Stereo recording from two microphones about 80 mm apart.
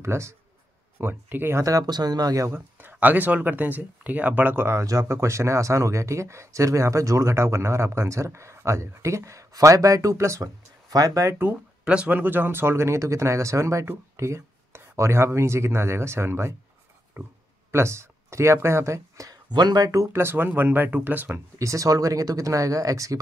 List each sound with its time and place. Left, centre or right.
0.0 s speech: right
1.6 s speech: right
2.4 s speech: right
11.8 s speech: centre; by 16.5 s right
17.1 s speech: centre
17.6 s speech: right
19.5 s speech: right
21.5 s speech: right